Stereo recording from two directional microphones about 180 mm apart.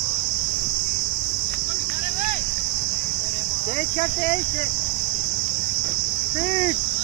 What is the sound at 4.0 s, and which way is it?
Speech, 40° left (ahead or behind).